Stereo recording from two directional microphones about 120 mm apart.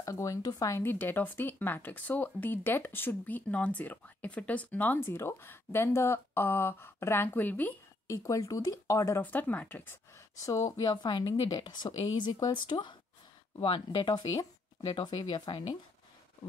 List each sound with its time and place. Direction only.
0.0 s speech: 25° left (ahead or behind)
8.1 s speech: 25° left (ahead or behind)
9.2 s speech: 15° left (ahead or behind)
10.4 s a woman's voice: 25° left (ahead or behind)